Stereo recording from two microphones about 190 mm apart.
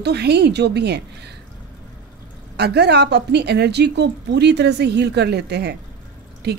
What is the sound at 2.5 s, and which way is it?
Speech, 60° right (ahead or behind).